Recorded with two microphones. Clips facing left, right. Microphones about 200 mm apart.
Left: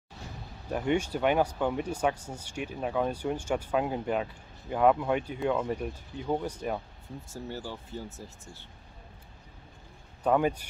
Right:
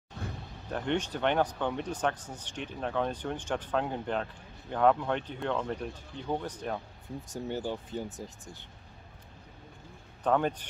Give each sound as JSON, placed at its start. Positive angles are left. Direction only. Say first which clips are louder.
{"t": 0.7, "sound": "speech", "louder": "left 3 dB", "side_deg": 10}
{"t": 7.2, "sound": "speech", "louder": "right 4 dB", "side_deg": -20}
{"t": 10.2, "sound": "speech", "louder": "left 2 dB", "side_deg": 10}